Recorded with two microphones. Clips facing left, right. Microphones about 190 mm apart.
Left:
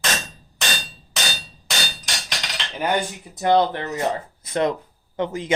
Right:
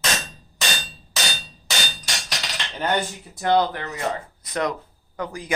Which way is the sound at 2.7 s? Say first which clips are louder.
Left 1 dB; 10° left (ahead or behind).